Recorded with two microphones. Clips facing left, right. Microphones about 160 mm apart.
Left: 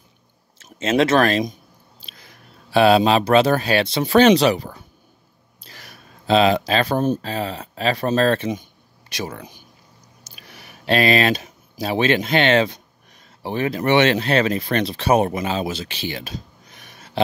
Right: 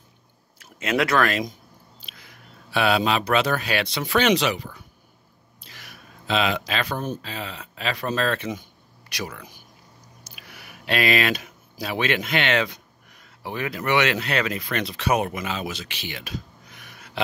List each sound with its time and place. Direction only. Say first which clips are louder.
0.6 s speech: left 5 dB; 25° left (ahead or behind)
5.6 s a sound: left 2 dB; 35° left (ahead or behind)
7.2 s speech: left 8 dB; 40° left (ahead or behind)